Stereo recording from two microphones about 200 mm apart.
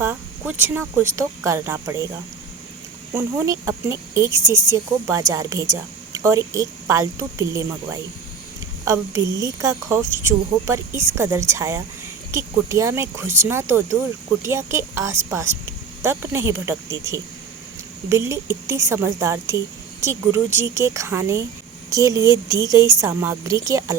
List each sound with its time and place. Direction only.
0.0 s a woman's voice: 10° right (ahead or behind)
3.2 s a woman's voice: 15° right (ahead or behind)
8.8 s a woman's voice: 15° right (ahead or behind)